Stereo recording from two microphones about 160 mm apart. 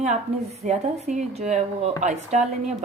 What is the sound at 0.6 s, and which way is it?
A woman's voice, 45° right (ahead or behind).